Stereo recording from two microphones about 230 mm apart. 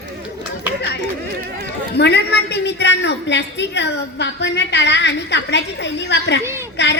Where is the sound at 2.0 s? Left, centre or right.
Left.